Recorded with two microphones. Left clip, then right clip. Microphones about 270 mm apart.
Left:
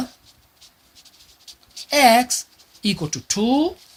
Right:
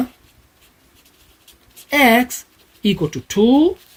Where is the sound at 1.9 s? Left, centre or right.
Left.